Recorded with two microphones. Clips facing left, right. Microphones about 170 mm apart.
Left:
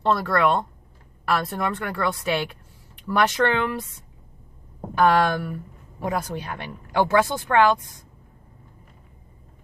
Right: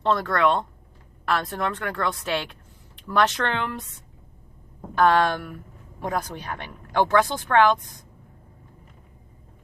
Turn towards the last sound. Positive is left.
turn(degrees=10)  # may be behind; listen again after turning